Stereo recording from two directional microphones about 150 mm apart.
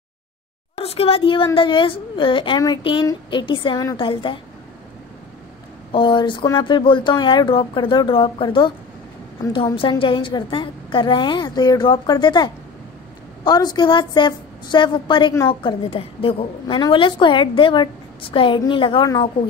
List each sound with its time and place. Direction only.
0.7 s a woman's voice: 40° left (ahead or behind)
5.9 s a woman's voice: 35° left (ahead or behind)